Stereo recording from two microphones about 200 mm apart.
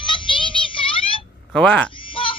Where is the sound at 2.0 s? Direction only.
25° left (ahead or behind).